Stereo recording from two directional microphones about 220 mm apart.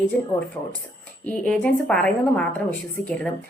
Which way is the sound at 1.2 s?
5° left (ahead or behind).